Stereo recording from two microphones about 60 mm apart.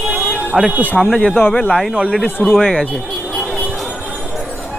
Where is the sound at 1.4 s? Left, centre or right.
Left.